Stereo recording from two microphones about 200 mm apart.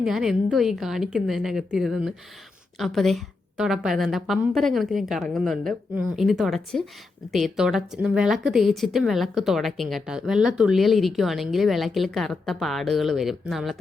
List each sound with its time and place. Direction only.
0.0 s a woman's voice: centre (ahead or behind)